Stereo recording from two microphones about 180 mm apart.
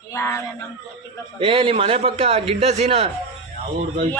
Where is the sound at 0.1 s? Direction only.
15° left (ahead or behind).